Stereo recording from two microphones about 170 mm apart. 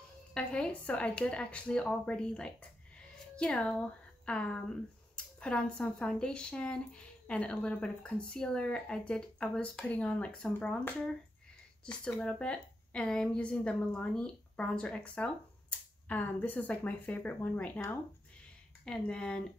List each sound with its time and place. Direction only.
0.3 s a woman's voice: 5° left (ahead or behind)